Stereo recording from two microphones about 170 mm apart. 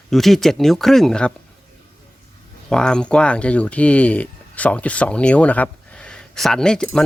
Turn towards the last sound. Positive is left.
turn(degrees=5)  # may be behind; listen again after turning